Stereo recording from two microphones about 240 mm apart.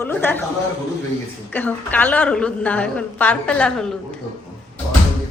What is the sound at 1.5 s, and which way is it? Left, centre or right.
A woman's voice, centre.